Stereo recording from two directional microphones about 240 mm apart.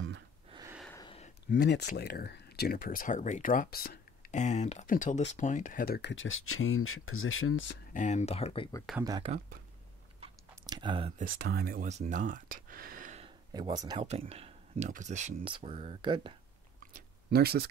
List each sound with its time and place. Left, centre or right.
0.5 s gasp: centre
0.9 s a sound: left
1.5 s speech: left
7.9 s speech: left
9.0 s speech: centre
10.2 s chewing: centre
11.3 s speech: right
13.5 s speech: centre
16.9 s chewing: right